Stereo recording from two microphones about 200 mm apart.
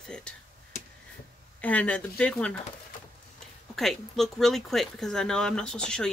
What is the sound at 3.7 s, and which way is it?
Speech, centre (ahead or behind).